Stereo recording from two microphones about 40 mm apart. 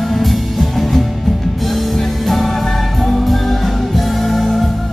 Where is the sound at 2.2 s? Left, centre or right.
Centre.